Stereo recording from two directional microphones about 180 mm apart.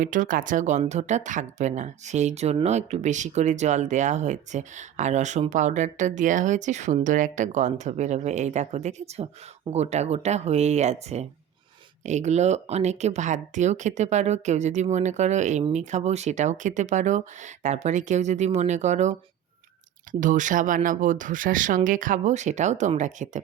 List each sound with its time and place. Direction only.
0.0 s speech: 45° right (ahead or behind)